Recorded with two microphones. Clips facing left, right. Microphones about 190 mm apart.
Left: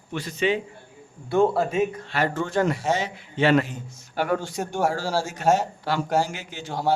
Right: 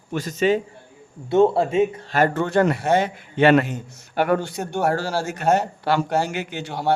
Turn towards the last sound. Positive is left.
turn(degrees=-65)  # may be behind; listen again after turning